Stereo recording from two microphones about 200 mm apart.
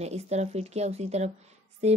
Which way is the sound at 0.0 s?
35° right (ahead or behind).